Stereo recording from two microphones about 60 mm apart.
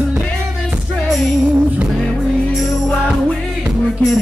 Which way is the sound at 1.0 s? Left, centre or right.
Centre.